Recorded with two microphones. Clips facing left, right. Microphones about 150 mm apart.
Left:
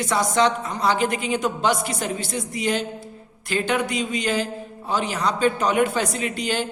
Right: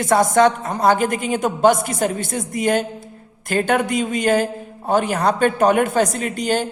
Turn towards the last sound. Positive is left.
turn(degrees=-45)  # may be behind; listen again after turning